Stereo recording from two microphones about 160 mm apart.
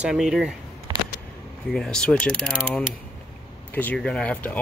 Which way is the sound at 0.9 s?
25° right (ahead or behind).